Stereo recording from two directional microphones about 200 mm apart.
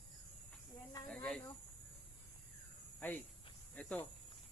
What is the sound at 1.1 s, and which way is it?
Snake, 5° left (ahead or behind).